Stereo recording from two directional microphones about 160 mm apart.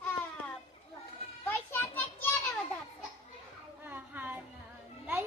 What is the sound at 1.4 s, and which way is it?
Children playing, 10° left (ahead or behind).